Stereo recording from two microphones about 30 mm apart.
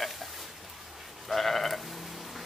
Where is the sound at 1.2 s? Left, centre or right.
Centre.